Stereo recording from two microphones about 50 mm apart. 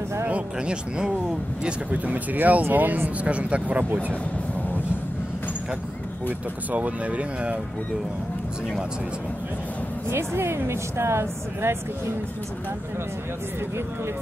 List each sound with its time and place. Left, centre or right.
0.3 s speech: centre
1.9 s speech: right
6.7 s speech: right
10.0 s speech: right